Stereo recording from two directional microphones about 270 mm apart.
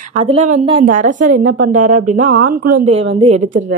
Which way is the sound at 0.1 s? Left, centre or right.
Right.